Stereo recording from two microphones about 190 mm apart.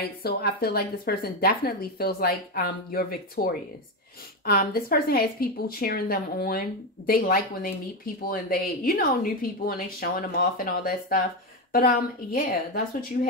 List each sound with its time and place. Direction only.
0.2 s speech: 55° left (ahead or behind)